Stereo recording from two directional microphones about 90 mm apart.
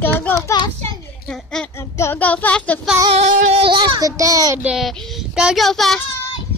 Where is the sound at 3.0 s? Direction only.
80° right.